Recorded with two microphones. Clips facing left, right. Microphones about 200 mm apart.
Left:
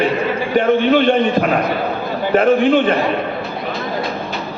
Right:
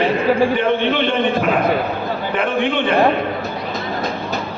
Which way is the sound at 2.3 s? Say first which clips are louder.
Left 8 dB; 40° left (ahead or behind).